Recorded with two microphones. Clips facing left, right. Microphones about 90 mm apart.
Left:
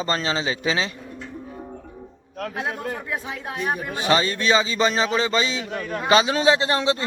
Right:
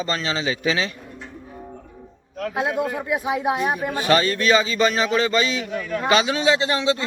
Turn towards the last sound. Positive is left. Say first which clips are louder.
# even
turn(degrees=35)  # may be behind; listen again after turning